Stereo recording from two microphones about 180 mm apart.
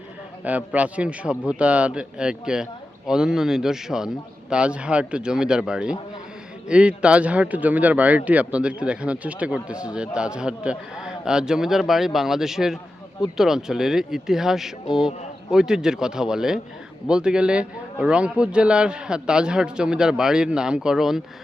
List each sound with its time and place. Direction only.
0.4 s a man's voice: 10° right (ahead or behind)